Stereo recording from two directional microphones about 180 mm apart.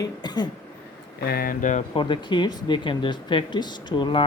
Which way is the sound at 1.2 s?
60° left (ahead or behind).